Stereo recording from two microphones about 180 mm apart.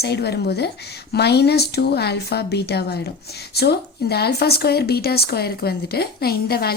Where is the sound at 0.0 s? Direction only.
65° left (ahead or behind).